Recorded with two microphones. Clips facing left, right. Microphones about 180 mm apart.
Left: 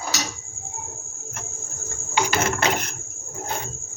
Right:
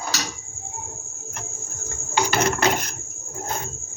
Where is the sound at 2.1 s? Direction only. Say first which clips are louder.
Right 1 dB; 35° right (ahead or behind).